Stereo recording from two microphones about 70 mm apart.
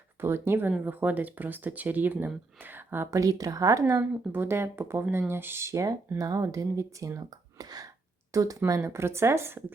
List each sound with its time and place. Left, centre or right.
0.2 s speech: right
3.1 s speech: right
4.3 s speech: right
6.1 s speech: right
7.2 s speech: right